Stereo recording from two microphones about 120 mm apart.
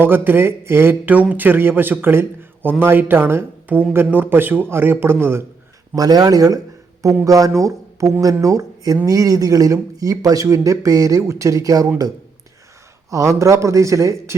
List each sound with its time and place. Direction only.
0.0 s speech: 15° right (ahead or behind)
6.0 s speech: 30° right (ahead or behind)
13.1 s speech: 25° right (ahead or behind)